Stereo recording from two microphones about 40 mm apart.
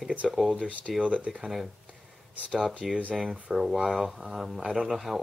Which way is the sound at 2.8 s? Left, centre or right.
Centre.